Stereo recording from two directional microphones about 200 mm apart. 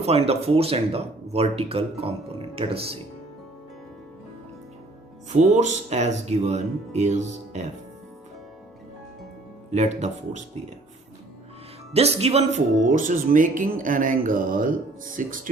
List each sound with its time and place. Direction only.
0.0 s speech: 30° right (ahead or behind)
5.3 s speech: 35° right (ahead or behind)
9.7 s speech: 35° right (ahead or behind)
11.9 s speech: 30° right (ahead or behind)